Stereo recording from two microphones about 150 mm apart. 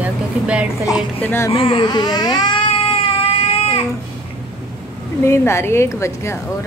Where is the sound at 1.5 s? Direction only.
35° left (ahead or behind).